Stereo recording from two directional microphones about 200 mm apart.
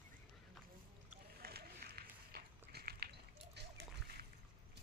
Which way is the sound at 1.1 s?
50° right (ahead or behind).